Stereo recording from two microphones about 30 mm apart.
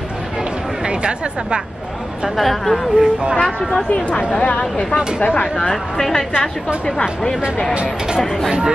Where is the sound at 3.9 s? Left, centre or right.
Left.